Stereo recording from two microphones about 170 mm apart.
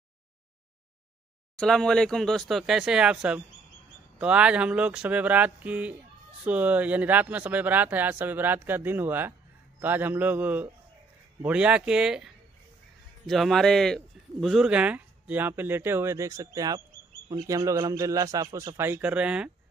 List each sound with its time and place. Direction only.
1.6 s a man's voice: 5° left (ahead or behind)
13.3 s a man's voice: centre (ahead or behind)